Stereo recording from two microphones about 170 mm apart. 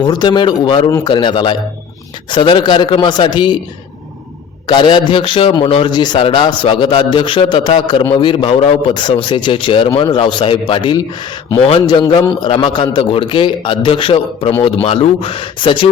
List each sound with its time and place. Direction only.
0.0 s a man's voice: 25° left (ahead or behind)
4.6 s a man's voice: 25° left (ahead or behind)